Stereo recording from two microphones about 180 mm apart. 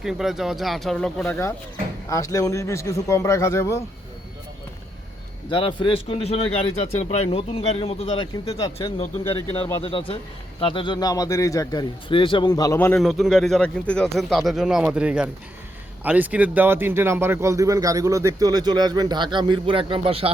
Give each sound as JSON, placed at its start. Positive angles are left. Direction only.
{"t": 0.0, "sound": "speech", "side_deg": 0}
{"t": 1.2, "sound": "speech", "side_deg": 15}
{"t": 5.5, "sound": "a man's voice", "side_deg": 30}
{"t": 13.0, "sound": "speech", "side_deg": 0}